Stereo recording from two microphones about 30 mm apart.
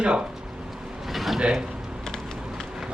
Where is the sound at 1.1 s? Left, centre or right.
Centre.